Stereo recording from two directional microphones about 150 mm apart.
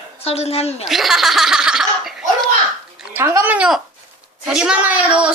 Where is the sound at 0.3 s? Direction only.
45° left (ahead or behind).